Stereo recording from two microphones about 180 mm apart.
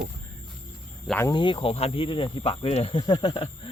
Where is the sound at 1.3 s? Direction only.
25° left (ahead or behind).